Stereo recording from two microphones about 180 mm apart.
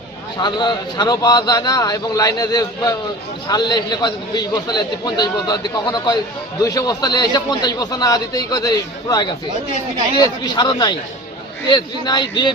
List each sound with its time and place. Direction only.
0.3 s a man's voice: 25° left (ahead or behind)